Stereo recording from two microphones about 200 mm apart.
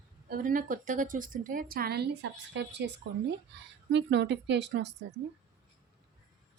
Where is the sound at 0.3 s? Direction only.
45° right (ahead or behind); by 4.9 s 60° right (ahead or behind).